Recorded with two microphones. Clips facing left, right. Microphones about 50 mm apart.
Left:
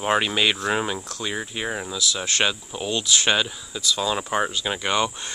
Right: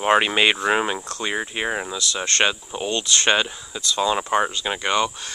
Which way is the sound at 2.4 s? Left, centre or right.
Centre.